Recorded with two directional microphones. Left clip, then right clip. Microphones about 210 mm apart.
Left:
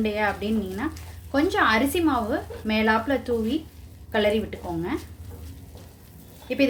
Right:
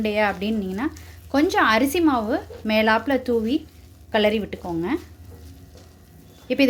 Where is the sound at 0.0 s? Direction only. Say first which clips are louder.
Right 3 dB; 45° right (ahead or behind).